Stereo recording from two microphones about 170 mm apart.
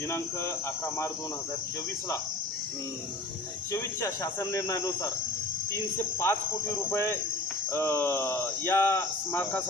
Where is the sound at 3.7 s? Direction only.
15° left (ahead or behind).